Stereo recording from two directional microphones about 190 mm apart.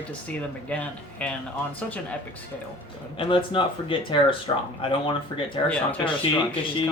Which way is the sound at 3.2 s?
25° left (ahead or behind).